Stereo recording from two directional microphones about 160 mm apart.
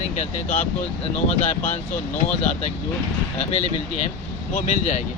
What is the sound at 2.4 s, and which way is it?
Speech, 40° left (ahead or behind).